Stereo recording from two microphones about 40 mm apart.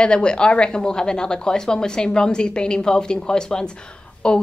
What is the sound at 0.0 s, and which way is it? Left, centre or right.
A woman's voice, left.